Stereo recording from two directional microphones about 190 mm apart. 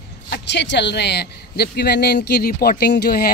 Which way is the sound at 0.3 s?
65° left (ahead or behind).